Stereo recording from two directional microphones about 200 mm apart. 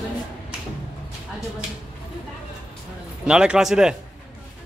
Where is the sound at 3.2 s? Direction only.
5° right (ahead or behind).